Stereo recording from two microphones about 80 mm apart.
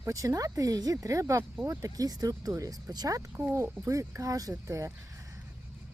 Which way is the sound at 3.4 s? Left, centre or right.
Right.